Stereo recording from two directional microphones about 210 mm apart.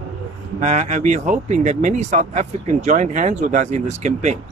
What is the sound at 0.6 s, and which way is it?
Speech, 35° right (ahead or behind).